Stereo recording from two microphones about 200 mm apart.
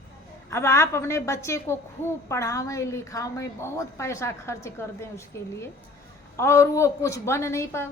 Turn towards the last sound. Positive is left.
turn(degrees=15)  # may be behind; listen again after turning